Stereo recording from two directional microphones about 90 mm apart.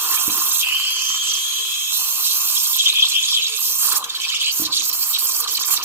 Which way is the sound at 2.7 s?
25° right (ahead or behind).